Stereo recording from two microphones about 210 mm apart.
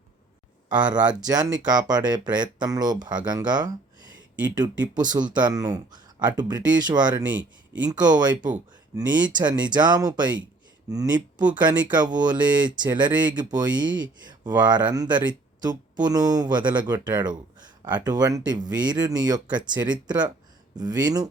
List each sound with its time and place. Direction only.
1.0 s speech: 20° right (ahead or behind)